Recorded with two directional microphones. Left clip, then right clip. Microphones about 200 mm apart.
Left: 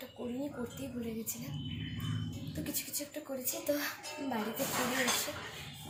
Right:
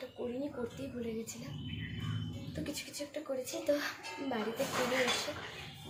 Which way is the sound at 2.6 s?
Centre (ahead or behind).